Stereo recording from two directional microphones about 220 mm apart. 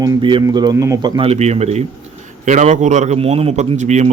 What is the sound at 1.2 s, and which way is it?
A man's voice, 30° right (ahead or behind).